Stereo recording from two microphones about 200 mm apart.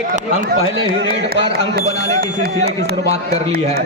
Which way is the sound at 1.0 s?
55° right (ahead or behind).